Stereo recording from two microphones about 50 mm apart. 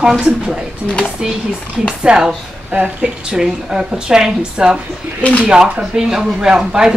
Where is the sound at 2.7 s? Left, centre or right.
Right.